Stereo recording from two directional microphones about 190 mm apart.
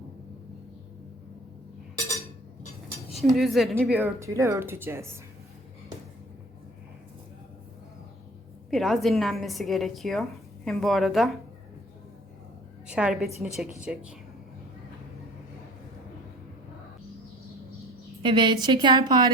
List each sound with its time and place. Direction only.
3.1 s a woman's voice: centre (ahead or behind)
8.7 s a woman's voice: centre (ahead or behind)
12.9 s a woman's voice: 5° right (ahead or behind)
18.2 s a woman's voice: 25° right (ahead or behind)